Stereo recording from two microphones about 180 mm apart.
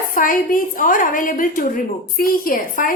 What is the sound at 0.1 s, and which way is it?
A woman's voice, 50° left (ahead or behind).